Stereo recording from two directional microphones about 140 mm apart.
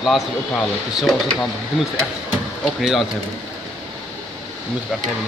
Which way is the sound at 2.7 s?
Centre (ahead or behind).